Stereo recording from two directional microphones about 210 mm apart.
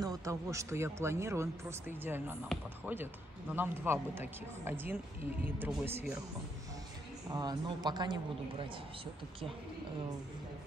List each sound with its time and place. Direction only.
0.0 s speech: 15° right (ahead or behind)
7.2 s a man's voice: 20° right (ahead or behind)